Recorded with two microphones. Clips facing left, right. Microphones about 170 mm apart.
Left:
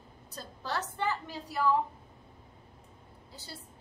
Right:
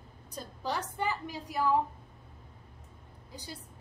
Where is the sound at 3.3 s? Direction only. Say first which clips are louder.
Right 3 dB; 15° right (ahead or behind).